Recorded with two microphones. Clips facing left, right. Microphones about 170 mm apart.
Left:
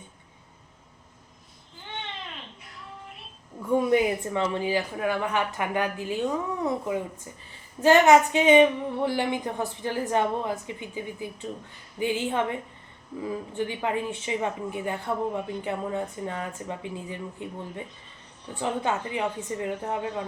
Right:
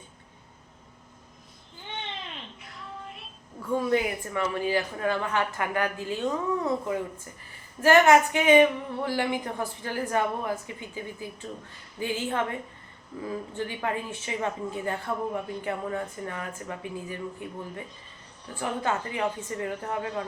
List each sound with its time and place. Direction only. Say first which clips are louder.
3.7 s a woman's voice: left 4 dB; 20° left (ahead or behind)